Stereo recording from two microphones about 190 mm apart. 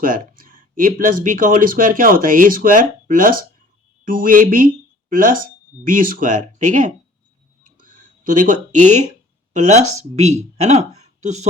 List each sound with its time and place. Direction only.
0.0 s speech: 45° right (ahead or behind)
7.6 s a sound: 45° right (ahead or behind)
9.5 s speech: 40° right (ahead or behind)